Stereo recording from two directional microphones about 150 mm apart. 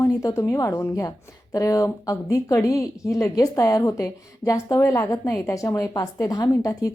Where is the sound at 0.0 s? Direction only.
20° left (ahead or behind).